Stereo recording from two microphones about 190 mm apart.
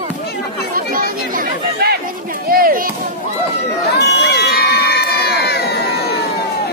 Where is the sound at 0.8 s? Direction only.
45° right (ahead or behind).